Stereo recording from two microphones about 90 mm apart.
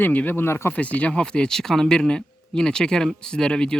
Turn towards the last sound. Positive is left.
turn(degrees=10)  # may be behind; listen again after turning